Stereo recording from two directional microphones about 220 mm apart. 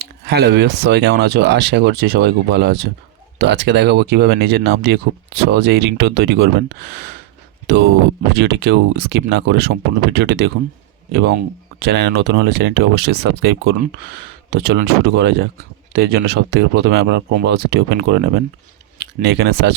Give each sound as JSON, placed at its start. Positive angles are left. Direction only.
{"t": 0.0, "sound": "speech", "side_deg": -50}
{"t": 8.3, "sound": "speech", "side_deg": -50}